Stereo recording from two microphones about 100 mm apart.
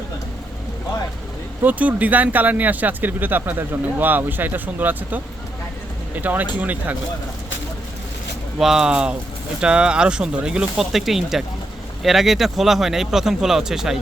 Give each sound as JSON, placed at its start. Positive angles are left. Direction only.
{"t": 1.6, "sound": "speech", "side_deg": -15}
{"t": 8.5, "sound": "speech", "side_deg": -5}